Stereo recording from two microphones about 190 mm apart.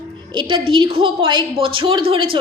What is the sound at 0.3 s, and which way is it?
A woman's voice, 25° right (ahead or behind).